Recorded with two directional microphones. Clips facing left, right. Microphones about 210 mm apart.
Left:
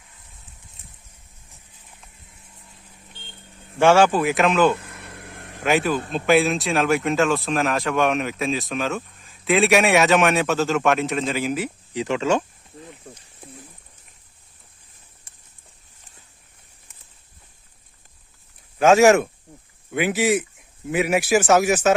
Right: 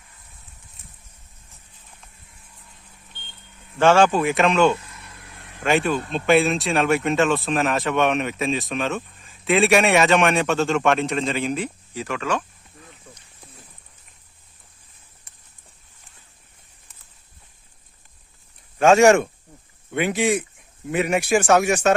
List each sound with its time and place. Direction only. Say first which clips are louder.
3.8 s speech: even; 10° left (ahead or behind)
4.8 s vehicle: left 5 dB; 60° left (ahead or behind)
5.6 s speech: even; 5° left (ahead or behind)
11.9 s speech: left 5 dB; 25° left (ahead or behind)
18.8 s speech: even; 5° left (ahead or behind)